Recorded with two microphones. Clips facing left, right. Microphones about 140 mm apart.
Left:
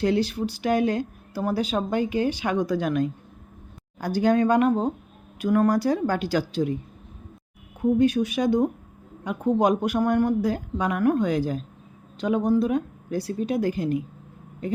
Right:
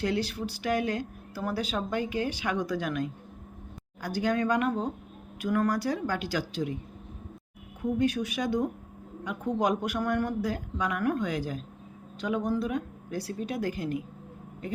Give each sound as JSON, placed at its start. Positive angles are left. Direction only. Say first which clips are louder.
{"t": 0.0, "sound": "speech", "louder": "left 6 dB", "side_deg": 25}
{"t": 7.8, "sound": "speech", "louder": "left 7 dB", "side_deg": 20}